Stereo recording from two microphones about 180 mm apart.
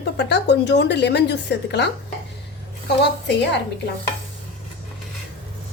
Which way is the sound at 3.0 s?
70° left (ahead or behind).